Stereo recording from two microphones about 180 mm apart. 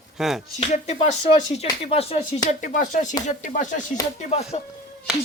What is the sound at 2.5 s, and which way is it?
Speech, 45° left (ahead or behind).